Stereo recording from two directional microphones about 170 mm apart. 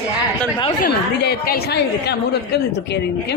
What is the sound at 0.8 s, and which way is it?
A woman's voice, 65° left (ahead or behind).